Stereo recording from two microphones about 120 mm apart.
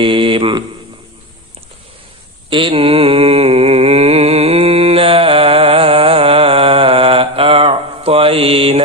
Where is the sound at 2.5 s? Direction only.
50° right (ahead or behind).